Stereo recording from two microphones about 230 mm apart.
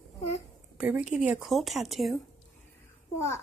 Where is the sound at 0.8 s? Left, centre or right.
Centre.